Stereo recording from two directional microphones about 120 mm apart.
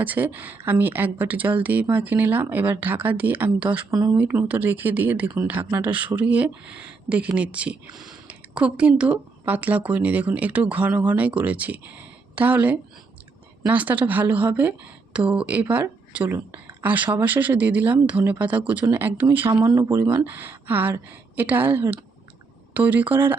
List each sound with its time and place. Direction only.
0.0 s speech: 15° right (ahead or behind)
19.5 s speech: 25° right (ahead or behind)